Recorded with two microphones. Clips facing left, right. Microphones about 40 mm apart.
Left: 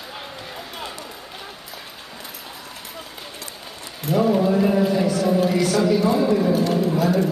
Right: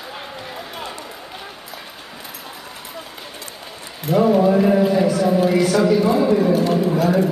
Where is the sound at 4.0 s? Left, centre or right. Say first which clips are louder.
Right 4 dB; centre.